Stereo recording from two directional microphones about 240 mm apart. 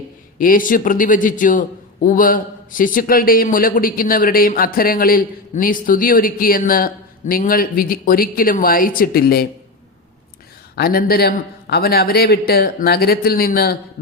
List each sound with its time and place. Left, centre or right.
0.3 s a man's voice: left
10.8 s a man's voice: left